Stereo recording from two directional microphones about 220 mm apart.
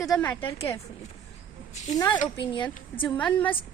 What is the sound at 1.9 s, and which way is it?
Speech, 15° left (ahead or behind).